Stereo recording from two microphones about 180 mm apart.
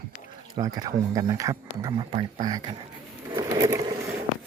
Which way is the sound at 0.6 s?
20° right (ahead or behind).